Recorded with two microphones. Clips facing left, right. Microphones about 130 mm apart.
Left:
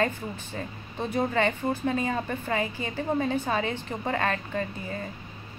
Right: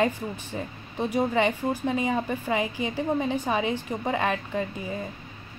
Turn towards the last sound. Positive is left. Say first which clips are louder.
# right 2 dB
turn(degrees=-15)  # may be behind; listen again after turning